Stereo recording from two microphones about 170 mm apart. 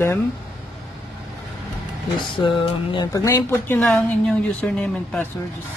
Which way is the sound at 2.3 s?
30° left (ahead or behind).